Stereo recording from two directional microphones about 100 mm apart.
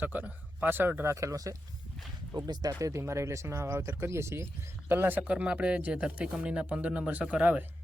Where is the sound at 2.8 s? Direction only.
30° right (ahead or behind).